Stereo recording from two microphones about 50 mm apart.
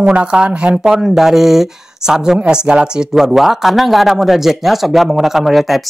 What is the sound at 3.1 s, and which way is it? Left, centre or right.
A man's voice, centre.